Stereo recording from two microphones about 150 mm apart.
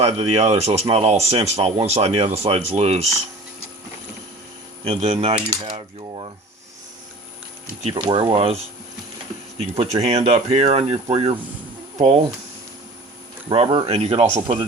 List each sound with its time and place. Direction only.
0.0 s speech: 45° right (ahead or behind)
4.8 s speech: 35° right (ahead or behind)
8.0 s speech: 30° right (ahead or behind)
9.6 s speech: 40° right (ahead or behind)
13.5 s speech: 40° right (ahead or behind)